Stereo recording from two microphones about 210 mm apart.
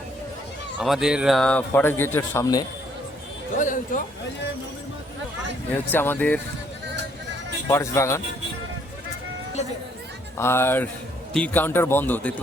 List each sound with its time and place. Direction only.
0.8 s speech: centre (ahead or behind); by 2.6 s 15° left (ahead or behind)
3.6 s speech: 40° left (ahead or behind)
5.7 s speech: 10° left (ahead or behind)
7.7 s speech: 15° left (ahead or behind)
10.3 s speech: 10° left (ahead or behind)